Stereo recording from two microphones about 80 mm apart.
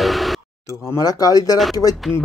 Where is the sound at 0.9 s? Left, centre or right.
Left.